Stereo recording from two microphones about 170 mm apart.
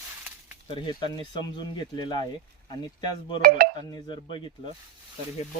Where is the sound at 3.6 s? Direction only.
60° right (ahead or behind).